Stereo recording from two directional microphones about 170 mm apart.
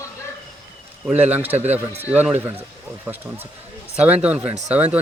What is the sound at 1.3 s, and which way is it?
Speech, 10° right (ahead or behind).